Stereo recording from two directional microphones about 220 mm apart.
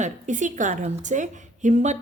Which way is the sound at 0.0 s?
35° right (ahead or behind).